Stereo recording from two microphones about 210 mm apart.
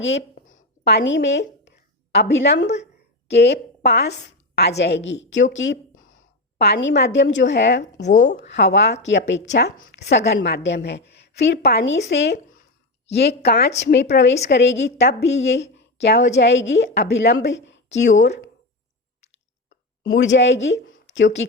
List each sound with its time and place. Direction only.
0.4 s a sound: 45° left (ahead or behind)
2.1 s a woman's voice: 55° left (ahead or behind)
8.0 s speech: 35° left (ahead or behind)
8.4 s a woman's voice: 55° left (ahead or behind)
20.1 s speech: 60° left (ahead or behind)